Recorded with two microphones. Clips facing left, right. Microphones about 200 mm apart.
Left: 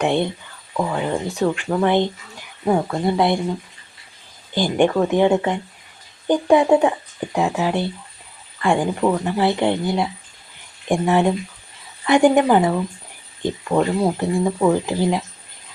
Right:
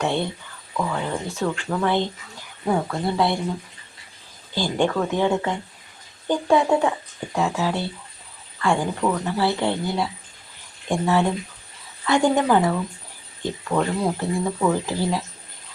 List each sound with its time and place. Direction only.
0.0 s speech: 15° left (ahead or behind)
4.5 s speech: 20° left (ahead or behind)